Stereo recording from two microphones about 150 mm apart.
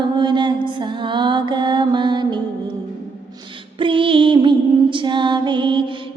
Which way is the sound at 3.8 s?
35° right (ahead or behind).